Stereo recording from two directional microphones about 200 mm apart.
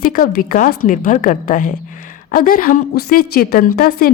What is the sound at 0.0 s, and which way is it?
A woman's voice, 45° left (ahead or behind).